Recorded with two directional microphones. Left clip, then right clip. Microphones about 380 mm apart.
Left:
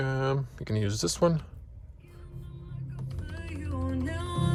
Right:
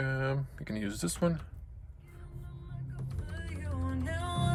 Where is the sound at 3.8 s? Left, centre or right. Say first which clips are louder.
Left 2 dB; centre.